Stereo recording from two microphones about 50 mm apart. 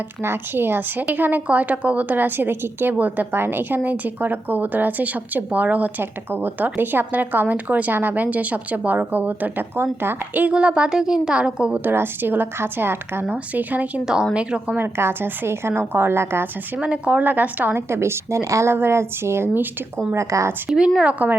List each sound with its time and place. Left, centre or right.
0.2 s a woman's voice: right
6.0 s a woman's voice: right
9.7 s a woman's voice: right
10.5 s a woman's voice: right
11.9 s a woman's voice: right
13.3 s a woman's voice: right
14.0 s speech: centre
14.8 s a woman's voice: right
16.8 s a woman's voice: right
17.7 s speech: right
18.7 s speech: right
20.1 s speech: right
20.7 s a woman's voice: centre